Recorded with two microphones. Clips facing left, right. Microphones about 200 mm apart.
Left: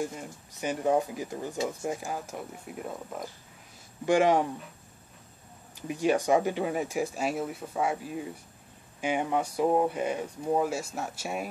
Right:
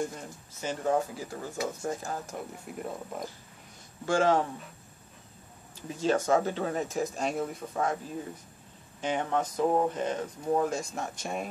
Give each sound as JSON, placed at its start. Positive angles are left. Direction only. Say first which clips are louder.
{"t": 0.0, "sound": "speech", "louder": "even", "side_deg": 10}
{"t": 4.0, "sound": "speech", "louder": "left 2 dB", "side_deg": 15}
{"t": 5.8, "sound": "speech", "louder": "left 1 dB", "side_deg": 15}